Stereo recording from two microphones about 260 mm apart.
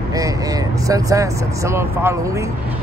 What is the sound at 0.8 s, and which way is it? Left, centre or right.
Speech, centre.